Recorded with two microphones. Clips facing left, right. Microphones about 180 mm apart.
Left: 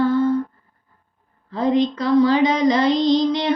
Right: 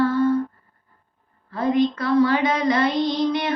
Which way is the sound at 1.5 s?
20° left (ahead or behind).